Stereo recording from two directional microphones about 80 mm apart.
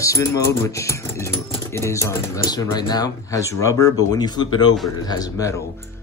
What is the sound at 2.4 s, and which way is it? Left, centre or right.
Speech, left.